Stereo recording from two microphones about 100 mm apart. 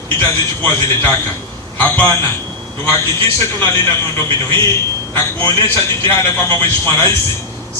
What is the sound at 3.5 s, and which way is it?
Speech, 25° left (ahead or behind).